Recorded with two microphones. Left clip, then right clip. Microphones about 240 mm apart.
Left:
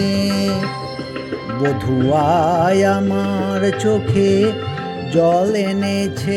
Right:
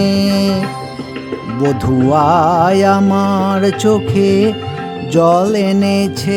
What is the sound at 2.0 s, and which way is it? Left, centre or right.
Music, centre.